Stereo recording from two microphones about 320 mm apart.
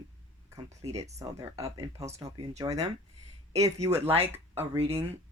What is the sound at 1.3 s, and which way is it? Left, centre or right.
Speech, centre.